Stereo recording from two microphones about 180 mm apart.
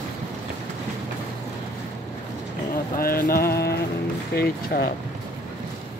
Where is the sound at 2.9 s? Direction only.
55° left (ahead or behind).